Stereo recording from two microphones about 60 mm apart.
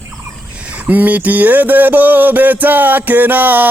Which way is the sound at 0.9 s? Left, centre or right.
Right.